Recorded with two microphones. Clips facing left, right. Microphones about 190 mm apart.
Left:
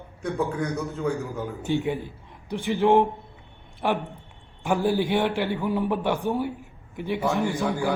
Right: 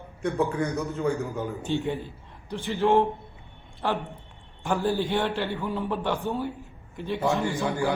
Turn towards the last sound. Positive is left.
turn(degrees=0)  # may be behind; listen again after turning